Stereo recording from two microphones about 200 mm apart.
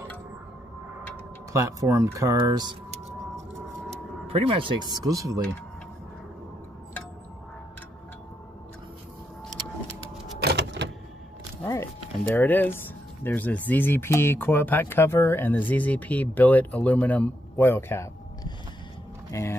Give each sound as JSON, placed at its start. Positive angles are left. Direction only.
{"t": 1.5, "sound": "speech", "side_deg": -15}
{"t": 4.3, "sound": "speech", "side_deg": -30}
{"t": 10.4, "sound": "power windows", "side_deg": -55}
{"t": 11.6, "sound": "speech", "side_deg": 15}